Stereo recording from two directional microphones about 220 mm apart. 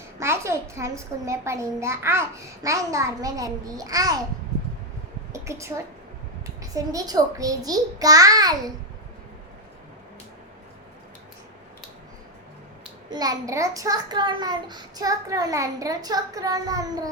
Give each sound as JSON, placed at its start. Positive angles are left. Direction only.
{"t": 0.2, "sound": "a child's voice", "side_deg": -10}
{"t": 5.3, "sound": "a woman's voice", "side_deg": -15}
{"t": 13.1, "sound": "a child's voice", "side_deg": -15}